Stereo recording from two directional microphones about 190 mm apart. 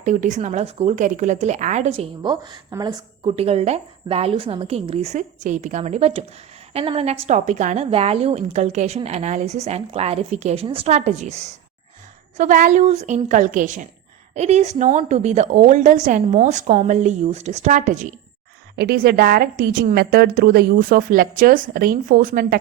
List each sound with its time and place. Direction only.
0.0 s a woman's voice: 40° right (ahead or behind); by 3.3 s 20° right (ahead or behind)
3.3 s a woman's voice: 35° right (ahead or behind)
18.8 s a woman's voice: 55° right (ahead or behind)